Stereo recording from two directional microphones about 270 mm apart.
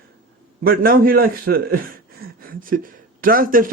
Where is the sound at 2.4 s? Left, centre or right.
Right.